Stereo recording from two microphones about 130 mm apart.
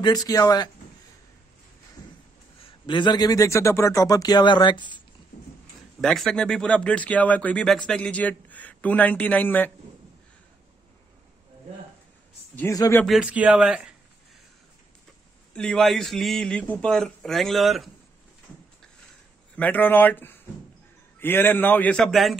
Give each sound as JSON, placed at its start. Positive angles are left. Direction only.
{"t": 0.0, "sound": "a man's voice", "side_deg": 30}
{"t": 2.6, "sound": "a man's voice", "side_deg": 35}
{"t": 5.3, "sound": "a sound", "side_deg": 75}
{"t": 5.9, "sound": "speech", "side_deg": 0}
{"t": 12.5, "sound": "speech", "side_deg": 25}
{"t": 13.0, "sound": "speech", "side_deg": -5}
{"t": 15.5, "sound": "speech", "side_deg": 5}
{"t": 19.5, "sound": "speech", "side_deg": 15}